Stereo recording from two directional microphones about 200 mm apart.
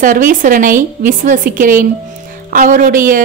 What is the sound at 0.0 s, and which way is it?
A woman's voice, 40° right (ahead or behind).